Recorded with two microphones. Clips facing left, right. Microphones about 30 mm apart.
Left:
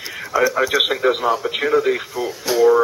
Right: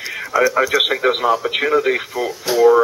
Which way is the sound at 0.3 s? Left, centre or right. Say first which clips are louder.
Right 2 dB; centre.